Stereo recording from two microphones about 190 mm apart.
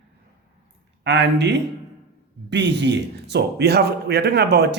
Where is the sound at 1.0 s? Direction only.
65° right (ahead or behind).